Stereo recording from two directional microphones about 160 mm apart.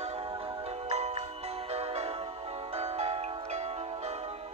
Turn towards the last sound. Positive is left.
turn(degrees=-40)  # may be behind; listen again after turning